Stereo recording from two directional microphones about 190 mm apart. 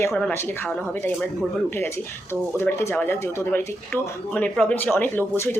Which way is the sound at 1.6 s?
10° left (ahead or behind).